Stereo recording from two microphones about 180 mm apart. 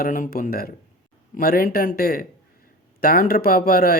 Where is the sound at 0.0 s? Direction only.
50° left (ahead or behind).